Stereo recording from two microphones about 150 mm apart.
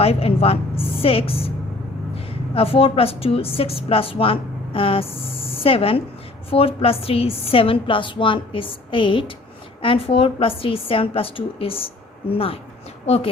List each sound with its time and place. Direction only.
0.0 s a woman's voice: 40° left (ahead or behind)